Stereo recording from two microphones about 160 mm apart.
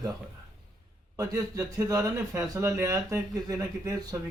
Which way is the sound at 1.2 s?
20° right (ahead or behind).